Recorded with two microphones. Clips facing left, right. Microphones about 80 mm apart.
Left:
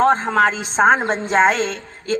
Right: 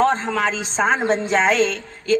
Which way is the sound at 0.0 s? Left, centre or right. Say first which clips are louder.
Left 3 dB; left.